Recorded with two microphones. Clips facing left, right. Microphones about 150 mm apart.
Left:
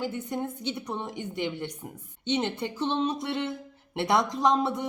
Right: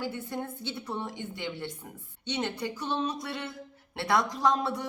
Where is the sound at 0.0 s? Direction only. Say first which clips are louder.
Left 3 dB; 20° left (ahead or behind).